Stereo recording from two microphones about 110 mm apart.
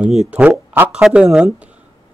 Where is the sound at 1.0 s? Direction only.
10° right (ahead or behind).